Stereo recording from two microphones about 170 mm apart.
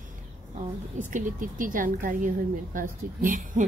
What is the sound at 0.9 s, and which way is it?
A woman's voice, 50° right (ahead or behind).